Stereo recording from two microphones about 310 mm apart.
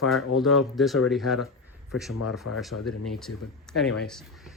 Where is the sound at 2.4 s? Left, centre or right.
Left.